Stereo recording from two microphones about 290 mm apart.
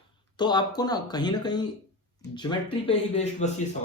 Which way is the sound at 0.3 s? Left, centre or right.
Centre.